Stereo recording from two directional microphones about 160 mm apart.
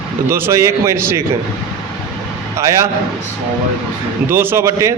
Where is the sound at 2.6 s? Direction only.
20° right (ahead or behind).